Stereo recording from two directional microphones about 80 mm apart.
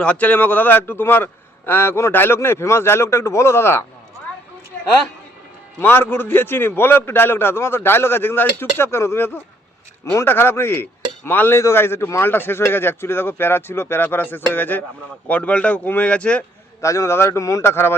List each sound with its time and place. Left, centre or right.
0.0 s a man's voice: centre
5.8 s a man's voice: left
16.8 s a man's voice: left